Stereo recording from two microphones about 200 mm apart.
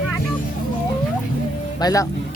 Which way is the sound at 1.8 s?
15° left (ahead or behind).